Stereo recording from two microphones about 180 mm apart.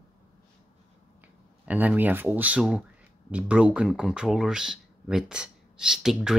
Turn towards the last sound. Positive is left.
turn(degrees=0)  # may be behind; listen again after turning